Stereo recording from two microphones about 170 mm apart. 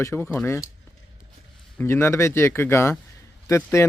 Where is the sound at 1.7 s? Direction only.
15° left (ahead or behind).